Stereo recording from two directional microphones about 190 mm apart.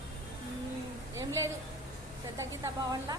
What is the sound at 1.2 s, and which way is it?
A woman's voice, 15° right (ahead or behind).